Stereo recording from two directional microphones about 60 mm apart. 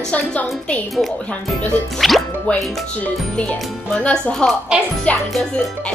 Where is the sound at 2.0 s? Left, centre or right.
Centre.